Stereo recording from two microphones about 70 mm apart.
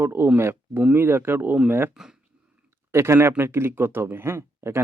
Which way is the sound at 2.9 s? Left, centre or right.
Right.